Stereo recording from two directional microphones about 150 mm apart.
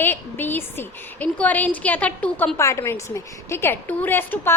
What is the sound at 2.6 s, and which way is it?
A woman's voice, 20° left (ahead or behind).